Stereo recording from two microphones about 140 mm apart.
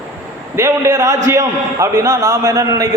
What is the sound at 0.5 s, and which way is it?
A man's voice, 20° right (ahead or behind).